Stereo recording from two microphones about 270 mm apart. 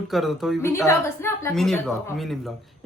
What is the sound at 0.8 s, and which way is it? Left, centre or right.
Speech, centre.